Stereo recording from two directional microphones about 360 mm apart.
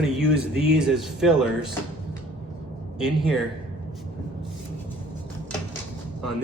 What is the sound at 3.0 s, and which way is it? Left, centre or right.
Speech, centre.